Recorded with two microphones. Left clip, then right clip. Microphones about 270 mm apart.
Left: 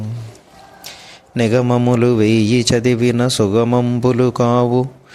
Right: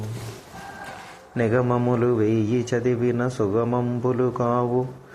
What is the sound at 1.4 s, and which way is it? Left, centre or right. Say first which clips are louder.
A man's voice: left 6 dB; left.